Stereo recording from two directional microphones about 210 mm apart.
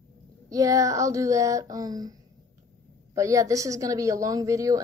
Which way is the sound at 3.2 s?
15° right (ahead or behind).